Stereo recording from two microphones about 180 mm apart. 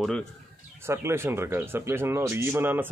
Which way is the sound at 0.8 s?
15° right (ahead or behind).